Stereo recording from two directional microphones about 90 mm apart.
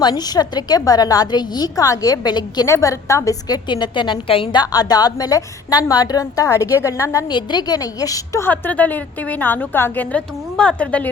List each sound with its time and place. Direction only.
0.0 s a woman's voice: 50° left (ahead or behind)
2.6 s a woman's voice: 35° left (ahead or behind)
3.7 s a woman's voice: 60° left (ahead or behind)
4.5 s a woman's voice: 45° left (ahead or behind)
7.3 s a woman's voice: 55° left (ahead or behind)
8.4 s a woman's voice: 20° left (ahead or behind)